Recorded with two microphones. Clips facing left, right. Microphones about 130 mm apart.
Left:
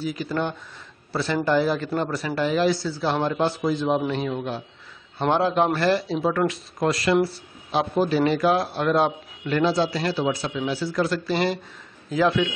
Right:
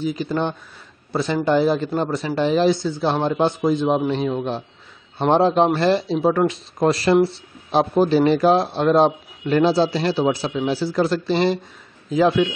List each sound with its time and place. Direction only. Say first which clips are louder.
0.0 s a man's voice: right 4 dB; 25° right (ahead or behind)